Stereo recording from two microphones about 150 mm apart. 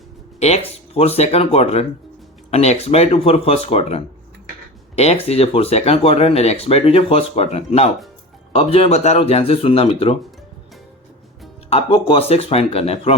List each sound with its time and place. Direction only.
0.3 s speech: 45° left (ahead or behind)
11.7 s speech: 40° left (ahead or behind)